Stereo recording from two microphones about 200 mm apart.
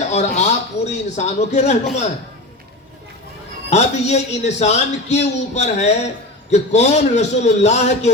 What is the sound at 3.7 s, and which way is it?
Speech, 35° left (ahead or behind).